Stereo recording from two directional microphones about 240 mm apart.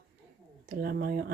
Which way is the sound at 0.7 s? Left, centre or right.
Right.